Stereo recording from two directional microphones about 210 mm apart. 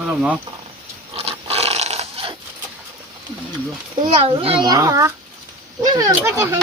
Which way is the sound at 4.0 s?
25° right (ahead or behind).